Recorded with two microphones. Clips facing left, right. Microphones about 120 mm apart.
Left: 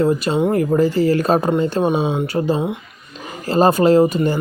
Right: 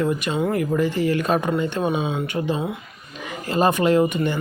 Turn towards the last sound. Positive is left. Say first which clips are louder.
# left 5 dB
turn(degrees=35)  # may be behind; listen again after turning